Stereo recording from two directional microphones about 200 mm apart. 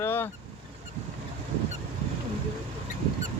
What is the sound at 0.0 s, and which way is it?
Honk, 10° left (ahead or behind).